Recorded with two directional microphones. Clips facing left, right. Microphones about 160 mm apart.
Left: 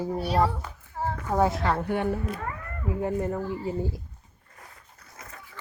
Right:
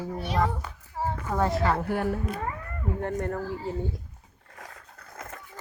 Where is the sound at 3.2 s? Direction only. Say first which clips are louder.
Left 2 dB; 5° left (ahead or behind).